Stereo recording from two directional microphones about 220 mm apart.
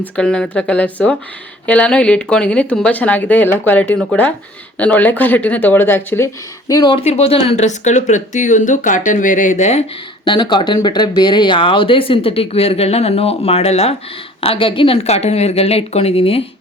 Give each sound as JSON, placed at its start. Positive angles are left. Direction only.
{"t": 0.0, "sound": "speech", "side_deg": 5}
{"t": 10.2, "sound": "speech", "side_deg": 20}